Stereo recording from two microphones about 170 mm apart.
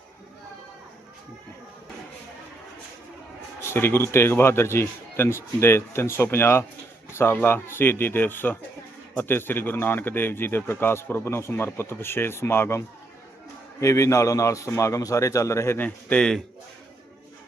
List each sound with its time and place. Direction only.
3.7 s speech: 15° left (ahead or behind)